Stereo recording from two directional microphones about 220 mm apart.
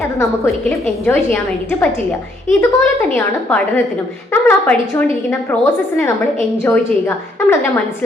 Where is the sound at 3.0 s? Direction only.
5° left (ahead or behind).